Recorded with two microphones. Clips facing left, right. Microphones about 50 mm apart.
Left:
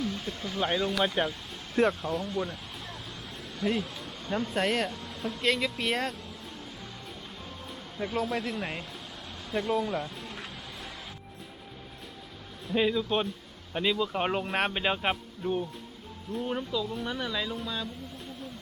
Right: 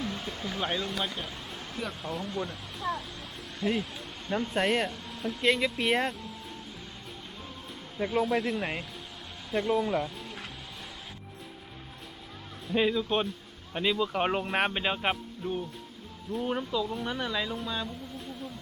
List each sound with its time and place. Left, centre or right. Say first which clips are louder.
0.0 s a sound: left 2 dB; centre
0.6 s speech: left 4 dB; centre
1.2 s speech: left 10 dB; left
1.9 s speech: left 4 dB; centre
7.9 s speech: right 3 dB; centre
12.6 s speech: even; centre
16.3 s speech: right 1 dB; centre